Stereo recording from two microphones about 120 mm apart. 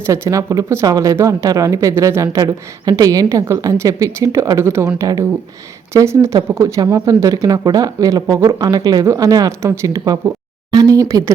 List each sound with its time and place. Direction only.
0.1 s speech: 25° right (ahead or behind)